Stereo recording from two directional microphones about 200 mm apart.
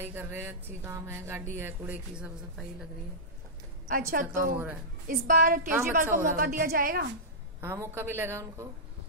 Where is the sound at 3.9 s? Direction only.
45° right (ahead or behind).